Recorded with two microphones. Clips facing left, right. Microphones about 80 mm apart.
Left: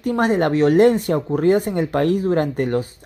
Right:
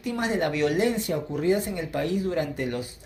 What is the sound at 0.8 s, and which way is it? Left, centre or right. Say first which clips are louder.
Speech: left 10 dB; left.